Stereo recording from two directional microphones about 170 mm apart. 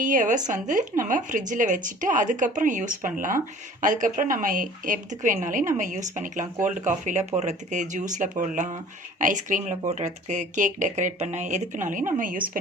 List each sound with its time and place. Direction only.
0.0 s a woman's voice: 50° right (ahead or behind)